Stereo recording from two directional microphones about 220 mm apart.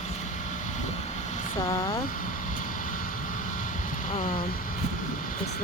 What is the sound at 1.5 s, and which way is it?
Speech, 15° left (ahead or behind).